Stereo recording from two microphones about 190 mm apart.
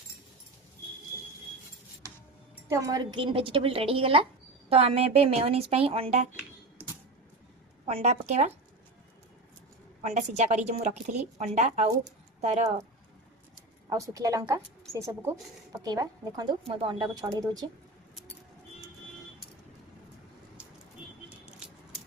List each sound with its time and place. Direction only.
2.6 s a woman's voice: 15° right (ahead or behind); by 6.2 s 30° right (ahead or behind)
7.9 s a woman's voice: 35° right (ahead or behind)
10.0 s a woman's voice: 35° right (ahead or behind)
13.6 s speech: 15° right (ahead or behind)